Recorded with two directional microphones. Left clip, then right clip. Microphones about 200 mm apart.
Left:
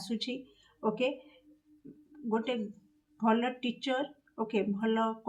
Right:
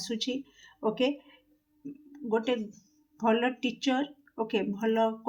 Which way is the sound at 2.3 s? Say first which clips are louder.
Right 4 dB; 35° right (ahead or behind).